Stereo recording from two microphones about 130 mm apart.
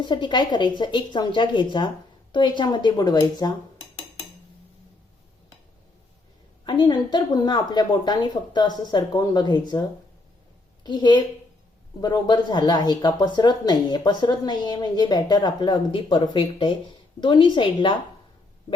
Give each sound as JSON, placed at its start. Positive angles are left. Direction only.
{"t": 0.0, "sound": "speech", "side_deg": 35}
{"t": 6.7, "sound": "speech", "side_deg": 35}
{"t": 10.8, "sound": "speech", "side_deg": 35}